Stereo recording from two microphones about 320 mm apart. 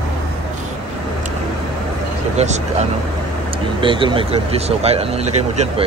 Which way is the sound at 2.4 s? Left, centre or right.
Centre.